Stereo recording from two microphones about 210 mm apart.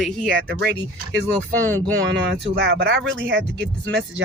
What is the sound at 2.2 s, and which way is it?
Speech, 50° right (ahead or behind).